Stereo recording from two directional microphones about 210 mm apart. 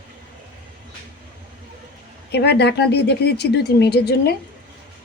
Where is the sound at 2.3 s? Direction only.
50° left (ahead or behind).